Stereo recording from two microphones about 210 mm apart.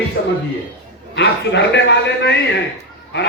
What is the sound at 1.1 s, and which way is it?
A man's voice, 55° left (ahead or behind).